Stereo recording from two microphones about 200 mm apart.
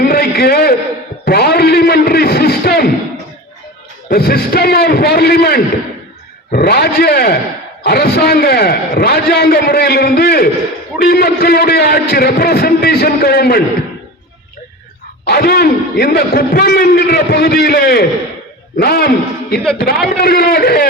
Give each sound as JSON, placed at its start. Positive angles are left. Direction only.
{"t": 0.0, "sound": "a sound", "side_deg": 50}
{"t": 4.1, "sound": "a man's voice", "side_deg": 50}
{"t": 15.2, "sound": "a man's voice", "side_deg": 50}